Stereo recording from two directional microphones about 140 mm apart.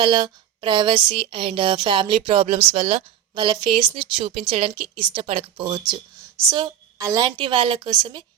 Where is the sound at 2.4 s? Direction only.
50° right (ahead or behind).